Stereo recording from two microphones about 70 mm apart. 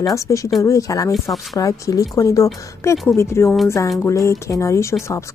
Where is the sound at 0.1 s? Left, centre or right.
Left.